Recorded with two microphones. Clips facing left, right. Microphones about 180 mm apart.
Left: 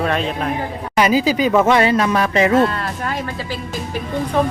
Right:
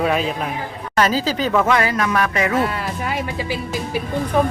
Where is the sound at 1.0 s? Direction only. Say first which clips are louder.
Left 3 dB; 10° left (ahead or behind); by 2.5 s 25° left (ahead or behind).